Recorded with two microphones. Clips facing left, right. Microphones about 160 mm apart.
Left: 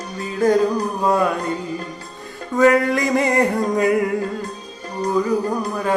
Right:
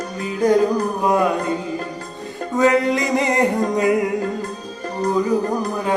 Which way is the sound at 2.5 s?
20° right (ahead or behind).